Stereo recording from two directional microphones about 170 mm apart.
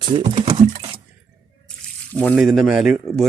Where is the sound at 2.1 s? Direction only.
10° left (ahead or behind).